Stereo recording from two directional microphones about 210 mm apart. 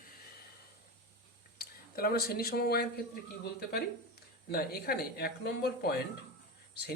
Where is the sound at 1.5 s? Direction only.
45° left (ahead or behind).